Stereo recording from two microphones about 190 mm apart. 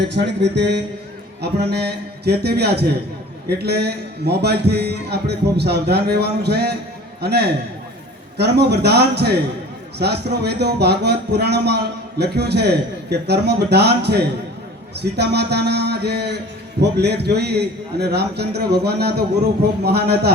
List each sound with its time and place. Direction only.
0.0 s a man's voice: 65° right (ahead or behind)